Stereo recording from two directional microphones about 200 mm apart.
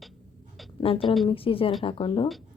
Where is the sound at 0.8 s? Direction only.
25° left (ahead or behind).